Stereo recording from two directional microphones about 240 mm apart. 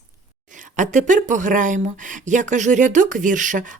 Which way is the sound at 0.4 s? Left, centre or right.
Right.